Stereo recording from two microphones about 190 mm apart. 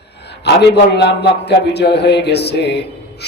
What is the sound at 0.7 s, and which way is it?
Speech, 60° left (ahead or behind).